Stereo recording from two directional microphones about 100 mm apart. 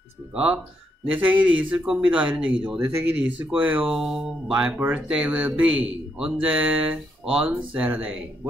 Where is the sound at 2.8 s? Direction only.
25° right (ahead or behind).